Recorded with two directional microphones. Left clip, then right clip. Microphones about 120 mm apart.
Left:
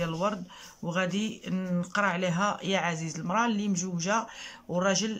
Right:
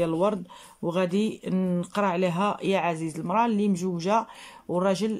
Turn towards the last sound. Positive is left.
turn(degrees=-40)  # may be behind; listen again after turning